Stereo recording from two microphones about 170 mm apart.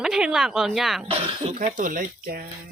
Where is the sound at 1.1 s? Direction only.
35° right (ahead or behind).